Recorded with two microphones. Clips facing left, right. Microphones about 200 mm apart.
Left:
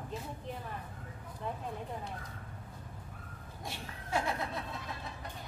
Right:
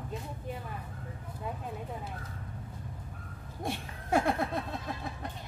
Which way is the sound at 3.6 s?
55° right (ahead or behind).